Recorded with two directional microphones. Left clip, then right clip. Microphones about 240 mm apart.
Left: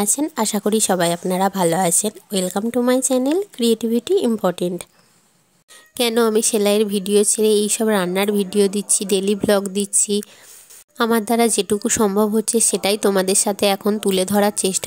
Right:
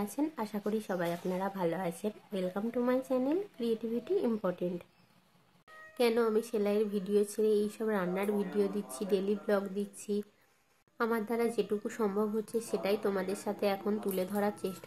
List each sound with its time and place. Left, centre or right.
0.0 s speech: left
5.9 s speech: left